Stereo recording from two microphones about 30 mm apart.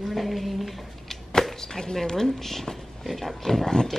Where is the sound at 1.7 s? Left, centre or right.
Left.